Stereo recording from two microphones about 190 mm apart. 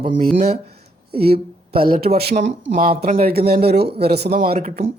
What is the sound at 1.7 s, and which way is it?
Speech, 30° right (ahead or behind).